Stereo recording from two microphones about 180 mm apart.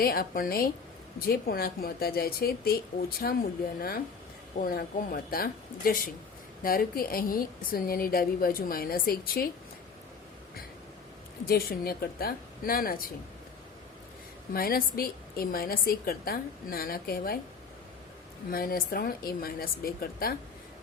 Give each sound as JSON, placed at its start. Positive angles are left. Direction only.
{"t": 0.0, "sound": "a woman's voice", "side_deg": 55}
{"t": 11.4, "sound": "a woman's voice", "side_deg": 55}
{"t": 14.5, "sound": "a woman's voice", "side_deg": 55}
{"t": 18.5, "sound": "a woman's voice", "side_deg": 55}